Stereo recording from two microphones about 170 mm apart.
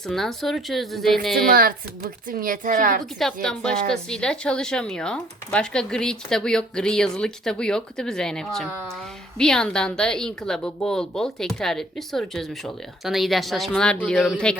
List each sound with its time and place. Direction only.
0.1 s a woman's voice: centre (ahead or behind)
1.5 s speech: 60° right (ahead or behind)
3.2 s a woman's voice: 5° left (ahead or behind)